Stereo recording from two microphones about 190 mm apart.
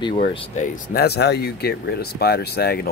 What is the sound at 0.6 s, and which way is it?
Speech, 50° left (ahead or behind).